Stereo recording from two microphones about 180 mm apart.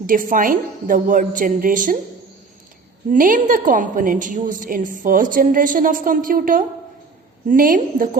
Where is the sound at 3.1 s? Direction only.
50° right (ahead or behind).